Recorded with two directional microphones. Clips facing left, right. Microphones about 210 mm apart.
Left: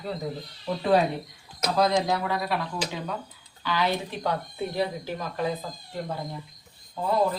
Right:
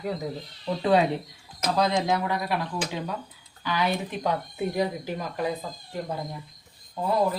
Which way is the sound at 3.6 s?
20° right (ahead or behind).